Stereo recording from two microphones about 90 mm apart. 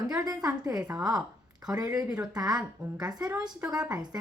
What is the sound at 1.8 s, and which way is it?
Speech, 45° right (ahead or behind).